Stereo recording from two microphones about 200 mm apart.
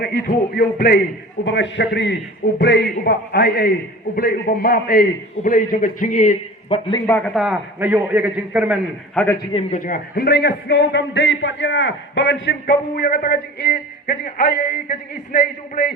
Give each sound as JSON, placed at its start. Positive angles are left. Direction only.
{"t": 0.0, "sound": "a man's voice", "side_deg": 50}
{"t": 1.5, "sound": "a man's voice", "side_deg": 65}
{"t": 7.1, "sound": "a man's voice", "side_deg": 5}
{"t": 9.1, "sound": "a man's voice", "side_deg": 10}
{"t": 9.5, "sound": "a man's voice", "side_deg": 30}